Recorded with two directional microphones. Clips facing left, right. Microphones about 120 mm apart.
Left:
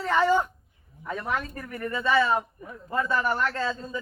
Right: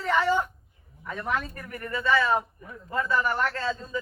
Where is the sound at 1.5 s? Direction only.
25° left (ahead or behind).